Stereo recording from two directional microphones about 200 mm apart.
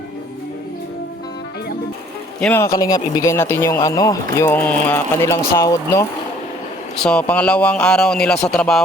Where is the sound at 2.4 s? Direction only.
10° left (ahead or behind).